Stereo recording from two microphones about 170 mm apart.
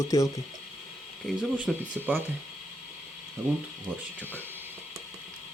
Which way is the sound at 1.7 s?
Centre (ahead or behind).